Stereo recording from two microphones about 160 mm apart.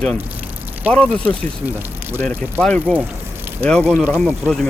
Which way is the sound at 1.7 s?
10° right (ahead or behind).